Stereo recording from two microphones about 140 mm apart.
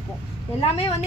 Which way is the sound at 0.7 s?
45° left (ahead or behind).